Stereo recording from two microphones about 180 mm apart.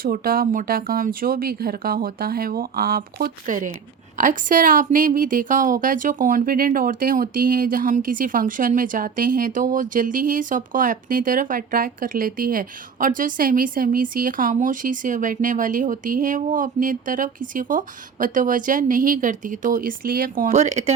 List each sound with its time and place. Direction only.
0.0 s a woman's voice: 55° right (ahead or behind); by 20.9 s 40° right (ahead or behind)